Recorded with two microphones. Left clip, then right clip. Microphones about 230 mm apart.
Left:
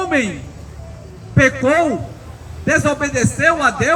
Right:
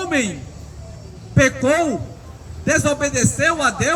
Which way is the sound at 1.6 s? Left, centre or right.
Right.